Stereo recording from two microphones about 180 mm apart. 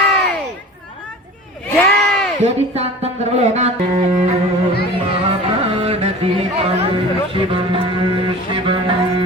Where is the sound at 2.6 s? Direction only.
35° right (ahead or behind).